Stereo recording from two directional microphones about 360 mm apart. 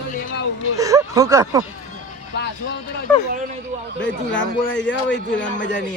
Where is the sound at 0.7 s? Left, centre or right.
Centre.